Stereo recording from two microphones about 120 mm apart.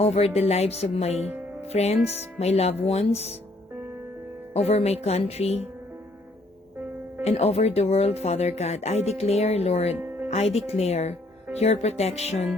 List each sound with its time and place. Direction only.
0.0 s speech: 60° left (ahead or behind)
4.5 s speech: 60° left (ahead or behind)
7.3 s speech: 60° left (ahead or behind)
9.9 s music: 15° right (ahead or behind)
10.2 s speech: 65° left (ahead or behind)